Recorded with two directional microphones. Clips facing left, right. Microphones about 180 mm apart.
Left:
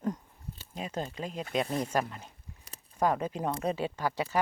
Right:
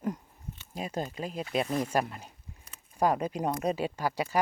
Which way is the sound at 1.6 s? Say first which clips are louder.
Right 2 dB; 30° left (ahead or behind).